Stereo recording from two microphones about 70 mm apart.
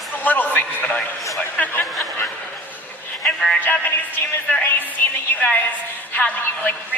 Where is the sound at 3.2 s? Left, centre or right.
Centre.